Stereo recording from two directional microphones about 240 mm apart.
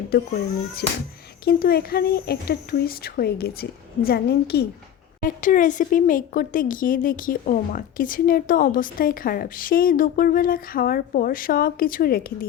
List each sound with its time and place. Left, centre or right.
0.1 s speech: left
1.5 s speech: left